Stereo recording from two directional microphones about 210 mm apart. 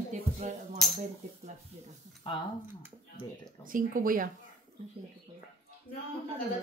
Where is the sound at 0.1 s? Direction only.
35° right (ahead or behind).